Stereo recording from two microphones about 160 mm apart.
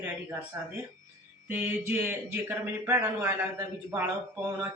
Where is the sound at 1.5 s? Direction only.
10° right (ahead or behind).